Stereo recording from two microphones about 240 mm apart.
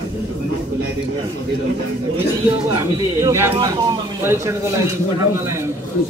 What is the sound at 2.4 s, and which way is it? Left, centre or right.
Speech, centre.